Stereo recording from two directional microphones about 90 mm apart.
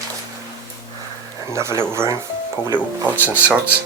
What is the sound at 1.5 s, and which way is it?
Speech, 30° right (ahead or behind).